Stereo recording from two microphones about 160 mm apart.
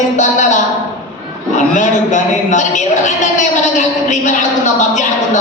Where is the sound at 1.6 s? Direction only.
50° left (ahead or behind).